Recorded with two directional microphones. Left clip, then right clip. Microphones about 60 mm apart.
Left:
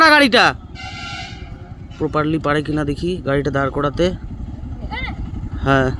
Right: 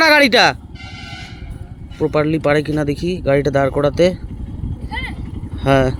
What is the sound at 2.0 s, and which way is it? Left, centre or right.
Speech, right.